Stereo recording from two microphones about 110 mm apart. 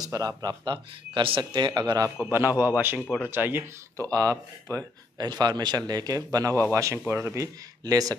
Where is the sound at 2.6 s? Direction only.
20° right (ahead or behind).